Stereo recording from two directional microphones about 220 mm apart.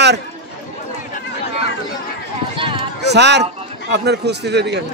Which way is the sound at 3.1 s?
50° right (ahead or behind).